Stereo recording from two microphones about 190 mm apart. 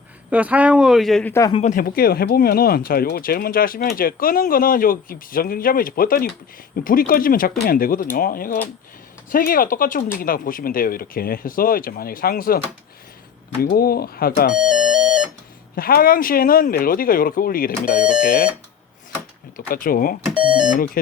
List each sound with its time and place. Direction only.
0.3 s speech: 10° right (ahead or behind)
1.3 s speech: 15° left (ahead or behind)
1.7 s speech: 50° left (ahead or behind)
14.5 s music: 5° right (ahead or behind)
15.7 s speech: 50° left (ahead or behind)
19.5 s speech: 50° left (ahead or behind)